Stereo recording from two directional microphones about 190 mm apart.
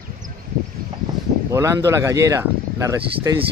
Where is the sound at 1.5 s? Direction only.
15° right (ahead or behind).